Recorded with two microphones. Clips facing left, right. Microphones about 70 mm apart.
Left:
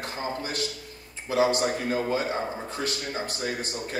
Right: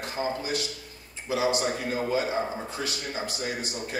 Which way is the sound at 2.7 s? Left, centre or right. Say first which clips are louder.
Left 2 dB; left.